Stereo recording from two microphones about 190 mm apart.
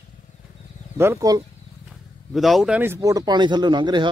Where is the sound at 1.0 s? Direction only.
15° right (ahead or behind).